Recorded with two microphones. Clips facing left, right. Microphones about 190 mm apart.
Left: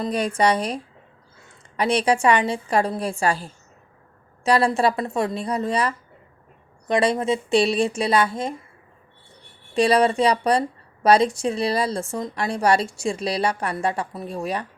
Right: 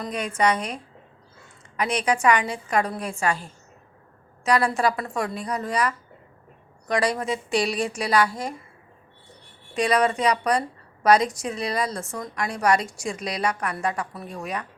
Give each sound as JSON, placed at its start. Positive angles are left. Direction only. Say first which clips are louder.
{"t": 0.0, "sound": "a woman's voice", "louder": "left 3 dB", "side_deg": 35}
{"t": 9.7, "sound": "a woman's voice", "louder": "left 4 dB", "side_deg": 30}